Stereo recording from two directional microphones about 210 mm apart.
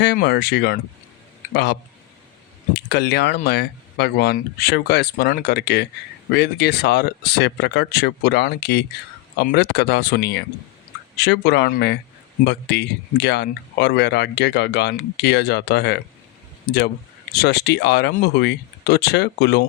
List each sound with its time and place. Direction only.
0.0 s speech: 55° left (ahead or behind)
17.3 s speech: 50° left (ahead or behind)